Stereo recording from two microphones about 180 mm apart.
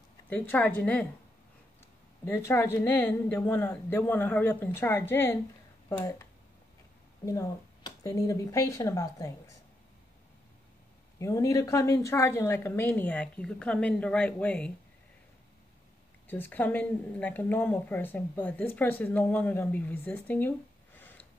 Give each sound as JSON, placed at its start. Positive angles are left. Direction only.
{"t": 0.3, "sound": "a woman's voice", "side_deg": 10}
{"t": 2.2, "sound": "a woman's voice", "side_deg": 15}
{"t": 7.2, "sound": "a woman's voice", "side_deg": 15}
{"t": 11.1, "sound": "a woman's voice", "side_deg": 15}
{"t": 16.3, "sound": "a woman's voice", "side_deg": 10}